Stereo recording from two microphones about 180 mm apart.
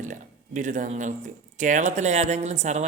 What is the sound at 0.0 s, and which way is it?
A man's voice, 45° right (ahead or behind).